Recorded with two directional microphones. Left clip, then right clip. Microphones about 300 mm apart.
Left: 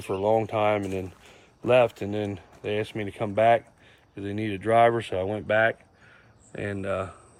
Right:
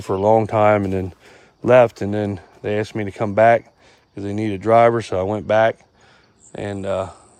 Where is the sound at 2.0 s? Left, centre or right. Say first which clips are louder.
Right 7 dB; right.